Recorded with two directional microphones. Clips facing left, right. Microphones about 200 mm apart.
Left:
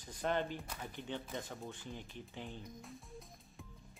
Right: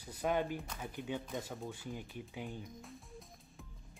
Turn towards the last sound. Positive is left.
turn(degrees=0)  # may be behind; listen again after turning